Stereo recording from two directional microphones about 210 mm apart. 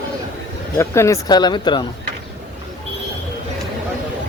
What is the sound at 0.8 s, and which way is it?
Speech, 15° left (ahead or behind).